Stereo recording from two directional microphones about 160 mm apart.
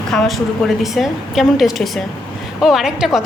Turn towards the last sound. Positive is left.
turn(degrees=-5)  # may be behind; listen again after turning